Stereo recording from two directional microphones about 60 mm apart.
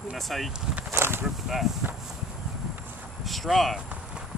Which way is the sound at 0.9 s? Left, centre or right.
Right.